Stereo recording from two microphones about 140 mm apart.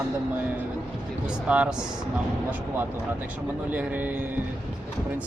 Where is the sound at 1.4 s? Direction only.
10° right (ahead or behind).